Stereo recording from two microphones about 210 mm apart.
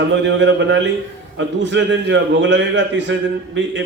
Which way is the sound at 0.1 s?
60° right (ahead or behind).